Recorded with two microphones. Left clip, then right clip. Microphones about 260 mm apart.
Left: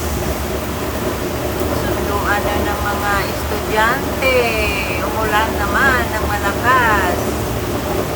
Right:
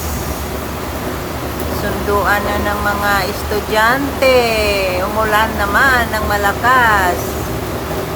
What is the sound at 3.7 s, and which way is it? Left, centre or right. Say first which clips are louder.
Speech: right 3 dB; right.